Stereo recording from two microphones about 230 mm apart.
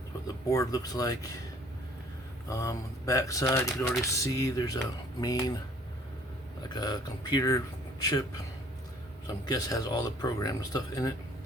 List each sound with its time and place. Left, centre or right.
0.5 s speech: centre
2.5 s speech: centre
6.6 s speech: centre
9.5 s speech: centre